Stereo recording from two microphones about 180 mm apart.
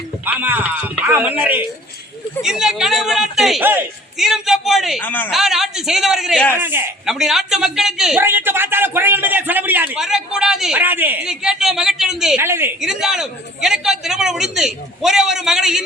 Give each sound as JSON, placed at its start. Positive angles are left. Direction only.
{"t": 0.3, "sound": "a man's voice", "side_deg": -10}
{"t": 4.9, "sound": "a man's voice", "side_deg": 10}
{"t": 5.3, "sound": "a man's voice", "side_deg": 0}
{"t": 6.5, "sound": "a man's voice", "side_deg": -10}
{"t": 12.5, "sound": "speech", "side_deg": -15}
{"t": 12.8, "sound": "a man's voice", "side_deg": -5}